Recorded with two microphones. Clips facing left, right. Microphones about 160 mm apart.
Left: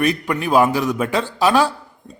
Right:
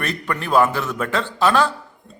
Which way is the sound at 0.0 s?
10° left (ahead or behind).